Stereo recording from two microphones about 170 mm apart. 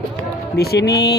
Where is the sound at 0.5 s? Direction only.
75° left (ahead or behind).